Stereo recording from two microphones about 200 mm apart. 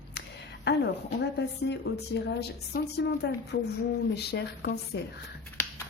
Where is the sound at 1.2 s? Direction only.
60° left (ahead or behind).